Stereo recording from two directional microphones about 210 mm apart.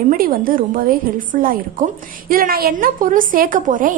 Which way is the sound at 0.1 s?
45° right (ahead or behind).